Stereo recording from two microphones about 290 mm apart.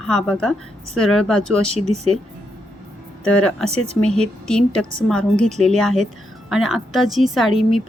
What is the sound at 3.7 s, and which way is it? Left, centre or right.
Speech, right.